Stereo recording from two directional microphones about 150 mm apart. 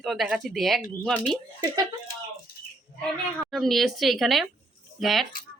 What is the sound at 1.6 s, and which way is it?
Speech, 30° right (ahead or behind).